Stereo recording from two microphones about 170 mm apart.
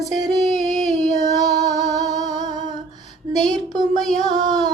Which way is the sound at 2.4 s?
45° left (ahead or behind).